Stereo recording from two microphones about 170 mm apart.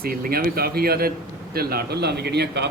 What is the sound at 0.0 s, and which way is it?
Speech, 60° right (ahead or behind).